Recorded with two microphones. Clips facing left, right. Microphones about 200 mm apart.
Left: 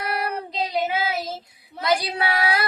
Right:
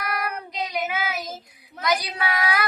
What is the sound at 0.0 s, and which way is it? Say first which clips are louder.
Child singing: left 2 dB; 30° left (ahead or behind).